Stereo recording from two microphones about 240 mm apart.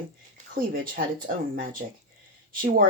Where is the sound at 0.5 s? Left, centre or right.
Right.